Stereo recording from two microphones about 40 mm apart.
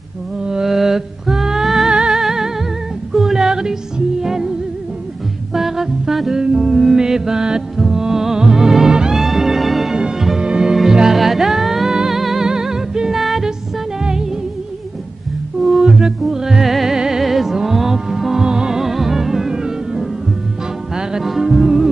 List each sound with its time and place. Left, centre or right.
0.5 s music: centre
1.9 s music: centre
3.1 s female singing: centre
4.2 s music: centre
5.5 s humming: centre
6.4 s music: centre
6.7 s mantra: centre
7.8 s music: centre
9.1 s music: centre
13.1 s music: centre
15.6 s music: centre
18.8 s music: centre